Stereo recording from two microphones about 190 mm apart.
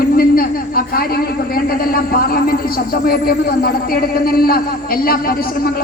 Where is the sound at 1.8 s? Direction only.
50° left (ahead or behind).